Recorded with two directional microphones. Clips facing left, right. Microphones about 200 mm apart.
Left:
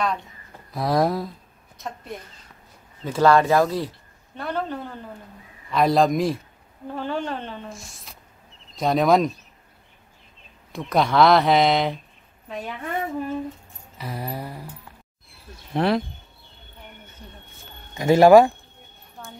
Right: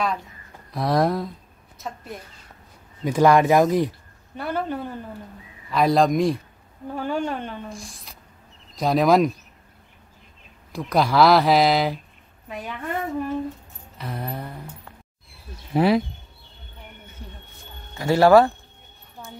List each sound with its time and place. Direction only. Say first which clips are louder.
0.0 s a woman's voice: even; centre (ahead or behind)
3.0 s speech: right 1 dB; 15° right (ahead or behind)
5.7 s speech: even; centre (ahead or behind)
10.7 s speech: even; centre (ahead or behind)
13.9 s a sound: even; 5° left (ahead or behind)
15.7 s speech: right 3 dB; 5° right (ahead or behind)
17.9 s a sound: left 2 dB; 15° left (ahead or behind)